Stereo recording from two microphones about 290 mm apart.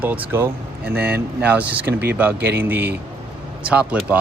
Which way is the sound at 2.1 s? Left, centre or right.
Centre.